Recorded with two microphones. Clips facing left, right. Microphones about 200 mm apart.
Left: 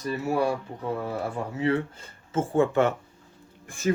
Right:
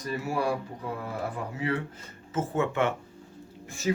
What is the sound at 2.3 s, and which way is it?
Speech, 30° left (ahead or behind).